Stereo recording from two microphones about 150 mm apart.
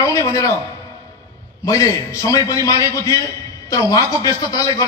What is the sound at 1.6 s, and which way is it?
A man's voice, 20° left (ahead or behind).